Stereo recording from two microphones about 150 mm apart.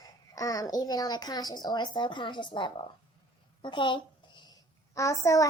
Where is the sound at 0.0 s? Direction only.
25° left (ahead or behind).